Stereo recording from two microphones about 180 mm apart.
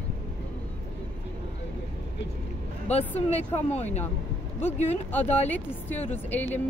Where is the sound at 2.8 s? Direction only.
35° left (ahead or behind).